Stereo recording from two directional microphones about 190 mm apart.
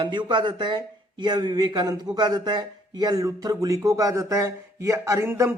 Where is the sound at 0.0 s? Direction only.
25° right (ahead or behind).